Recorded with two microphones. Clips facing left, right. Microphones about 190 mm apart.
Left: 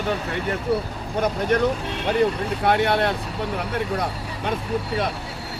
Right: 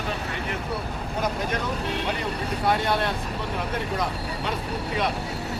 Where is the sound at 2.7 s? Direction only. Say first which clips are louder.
Left 4 dB; 60° left (ahead or behind).